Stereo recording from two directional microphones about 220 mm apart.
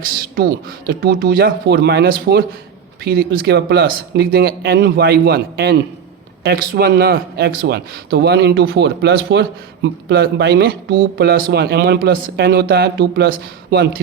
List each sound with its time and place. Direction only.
0.1 s a man's voice: 45° right (ahead or behind)